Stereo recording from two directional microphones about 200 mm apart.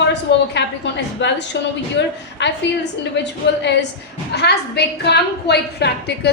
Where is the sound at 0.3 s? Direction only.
60° left (ahead or behind).